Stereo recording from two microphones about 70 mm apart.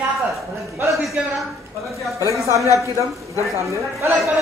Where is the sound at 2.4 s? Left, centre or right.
Right.